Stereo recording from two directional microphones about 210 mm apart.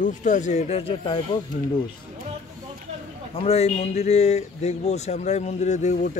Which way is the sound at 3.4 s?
30° left (ahead or behind).